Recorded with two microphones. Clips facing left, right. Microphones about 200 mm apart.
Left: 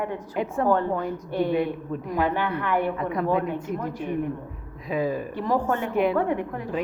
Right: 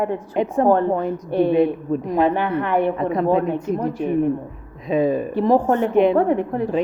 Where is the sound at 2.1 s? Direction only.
25° right (ahead or behind).